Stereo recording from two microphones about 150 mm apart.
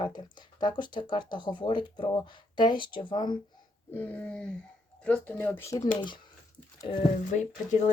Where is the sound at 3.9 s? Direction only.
10° left (ahead or behind).